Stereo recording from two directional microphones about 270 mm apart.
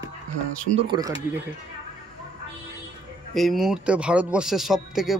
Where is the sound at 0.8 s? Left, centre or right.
Centre.